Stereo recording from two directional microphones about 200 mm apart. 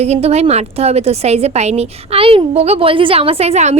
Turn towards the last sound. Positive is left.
turn(degrees=-35)  # may be behind; listen again after turning